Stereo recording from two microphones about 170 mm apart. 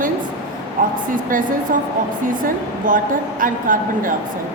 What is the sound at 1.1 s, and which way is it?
A woman's voice, 50° right (ahead or behind).